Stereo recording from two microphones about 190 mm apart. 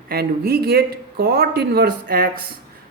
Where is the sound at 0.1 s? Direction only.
55° right (ahead or behind).